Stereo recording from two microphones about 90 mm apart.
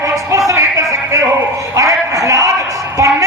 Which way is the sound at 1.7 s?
35° right (ahead or behind).